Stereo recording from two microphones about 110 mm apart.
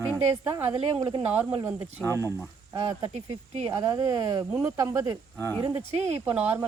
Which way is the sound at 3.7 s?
30° right (ahead or behind).